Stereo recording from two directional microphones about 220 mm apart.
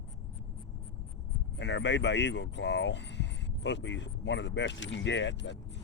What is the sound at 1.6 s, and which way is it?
Speech, 55° left (ahead or behind).